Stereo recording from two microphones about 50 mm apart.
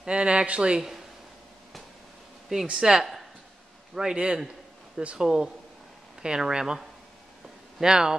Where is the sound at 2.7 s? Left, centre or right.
Centre.